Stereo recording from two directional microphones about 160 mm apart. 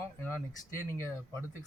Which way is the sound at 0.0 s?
10° left (ahead or behind).